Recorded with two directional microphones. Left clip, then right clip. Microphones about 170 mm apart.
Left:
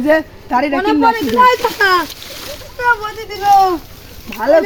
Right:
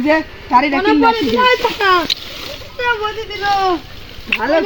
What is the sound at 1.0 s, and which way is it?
Speech, 5° left (ahead or behind).